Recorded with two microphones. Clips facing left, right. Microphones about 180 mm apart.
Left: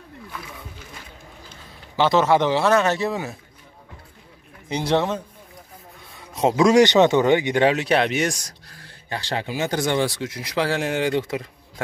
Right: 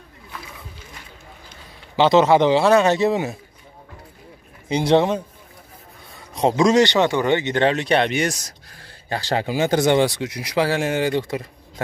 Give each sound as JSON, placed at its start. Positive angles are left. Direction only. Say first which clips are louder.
{"t": 2.0, "sound": "speech", "louder": "right 3 dB", "side_deg": -20}
{"t": 4.6, "sound": "speech", "louder": "right 5 dB", "side_deg": -15}
{"t": 6.1, "sound": "speech", "louder": "right 1 dB", "side_deg": 0}
{"t": 9.1, "sound": "speech", "louder": "right 5 dB", "side_deg": -40}